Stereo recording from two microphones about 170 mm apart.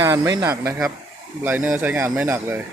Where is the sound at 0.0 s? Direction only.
20° right (ahead or behind).